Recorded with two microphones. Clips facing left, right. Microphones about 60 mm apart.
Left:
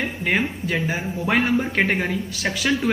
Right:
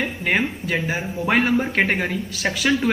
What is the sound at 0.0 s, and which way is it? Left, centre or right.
Speech, centre.